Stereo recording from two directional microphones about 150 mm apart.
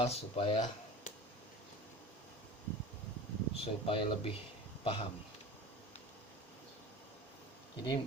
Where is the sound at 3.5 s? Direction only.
40° left (ahead or behind).